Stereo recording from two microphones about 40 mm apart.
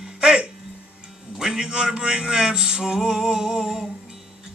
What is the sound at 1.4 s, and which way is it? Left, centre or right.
A man's voice, centre.